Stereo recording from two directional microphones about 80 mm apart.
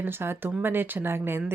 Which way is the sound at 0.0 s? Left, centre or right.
Right.